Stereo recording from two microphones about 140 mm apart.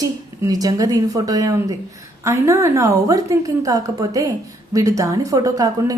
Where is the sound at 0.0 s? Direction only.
25° right (ahead or behind).